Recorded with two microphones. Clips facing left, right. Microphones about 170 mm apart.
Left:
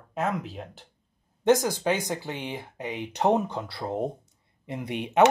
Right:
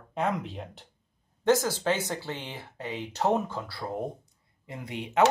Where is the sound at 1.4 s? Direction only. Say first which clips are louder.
Left 2 dB; 15° left (ahead or behind).